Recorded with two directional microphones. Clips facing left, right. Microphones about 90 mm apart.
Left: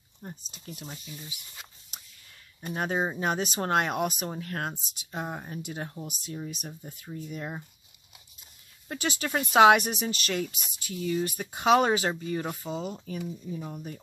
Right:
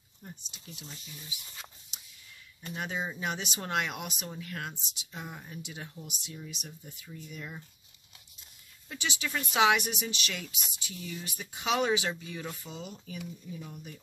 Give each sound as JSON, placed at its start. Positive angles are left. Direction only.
{"t": 0.2, "sound": "speech", "side_deg": 40}
{"t": 1.9, "sound": "a sound", "side_deg": 45}
{"t": 2.6, "sound": "speech", "side_deg": 45}
{"t": 8.8, "sound": "speech", "side_deg": 45}